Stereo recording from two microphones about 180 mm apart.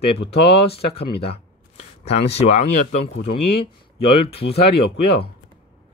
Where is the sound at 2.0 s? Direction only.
35° left (ahead or behind).